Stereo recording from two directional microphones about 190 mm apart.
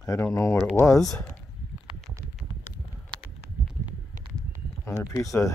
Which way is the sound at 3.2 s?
10° right (ahead or behind).